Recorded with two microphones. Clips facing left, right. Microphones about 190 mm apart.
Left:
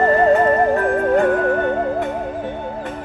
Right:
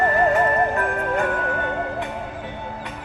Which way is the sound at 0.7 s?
35° left (ahead or behind).